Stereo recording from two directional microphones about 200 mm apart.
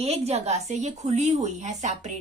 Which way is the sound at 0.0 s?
30° right (ahead or behind).